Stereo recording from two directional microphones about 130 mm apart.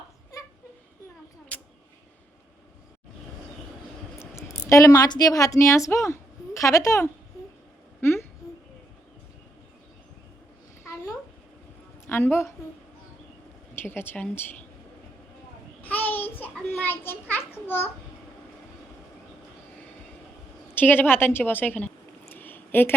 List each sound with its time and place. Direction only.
4.4 s a woman's voice: 25° left (ahead or behind)
12.0 s a woman's voice: 15° left (ahead or behind)
13.7 s a woman's voice: 15° left (ahead or behind)
15.8 s a sound: 15° left (ahead or behind)
20.7 s a woman's voice: 15° left (ahead or behind)
22.3 s a sound: 15° left (ahead or behind)